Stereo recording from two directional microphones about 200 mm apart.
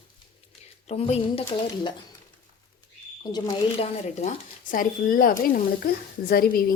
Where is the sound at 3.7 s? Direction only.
35° left (ahead or behind).